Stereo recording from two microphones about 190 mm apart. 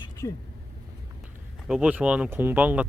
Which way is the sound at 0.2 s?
15° left (ahead or behind).